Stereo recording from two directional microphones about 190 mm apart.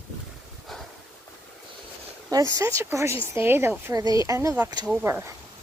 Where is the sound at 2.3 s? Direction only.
20° right (ahead or behind).